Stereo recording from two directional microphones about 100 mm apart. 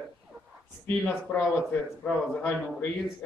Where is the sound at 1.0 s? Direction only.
15° left (ahead or behind).